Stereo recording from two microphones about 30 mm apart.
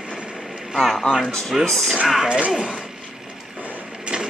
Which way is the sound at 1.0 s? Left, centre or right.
Centre.